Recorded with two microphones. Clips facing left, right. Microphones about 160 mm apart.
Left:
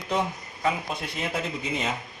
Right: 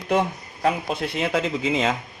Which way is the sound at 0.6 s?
80° right.